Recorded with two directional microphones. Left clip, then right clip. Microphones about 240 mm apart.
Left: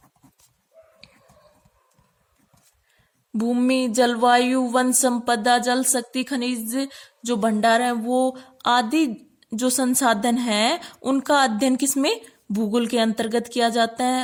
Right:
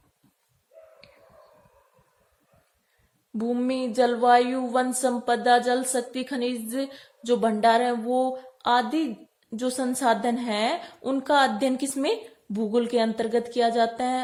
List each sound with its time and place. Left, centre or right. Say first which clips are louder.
3.3 s speech: left 5 dB; left